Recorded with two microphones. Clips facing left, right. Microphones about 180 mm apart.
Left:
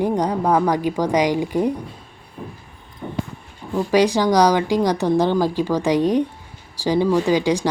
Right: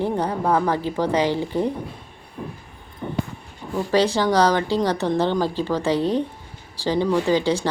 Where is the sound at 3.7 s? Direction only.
15° left (ahead or behind).